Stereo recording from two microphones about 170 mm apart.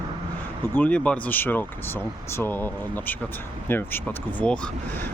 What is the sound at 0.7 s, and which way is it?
Speech, 10° left (ahead or behind).